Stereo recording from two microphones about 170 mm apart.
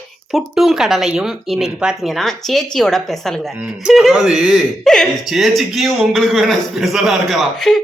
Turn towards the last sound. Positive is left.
turn(degrees=0)  # may be behind; listen again after turning